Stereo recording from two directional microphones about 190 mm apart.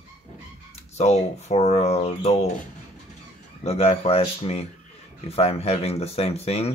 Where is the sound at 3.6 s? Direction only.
30° left (ahead or behind).